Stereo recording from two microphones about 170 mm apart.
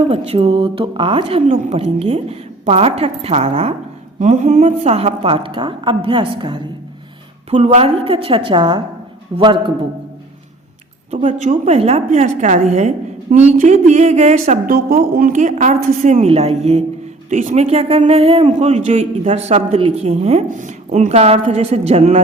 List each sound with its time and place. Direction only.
0.1 s a man's voice: 35° right (ahead or behind)
7.5 s a man's voice: 40° right (ahead or behind)
11.1 s a man's voice: 45° right (ahead or behind)
14.8 s a woman's voice: 60° right (ahead or behind); by 22.2 s 40° right (ahead or behind)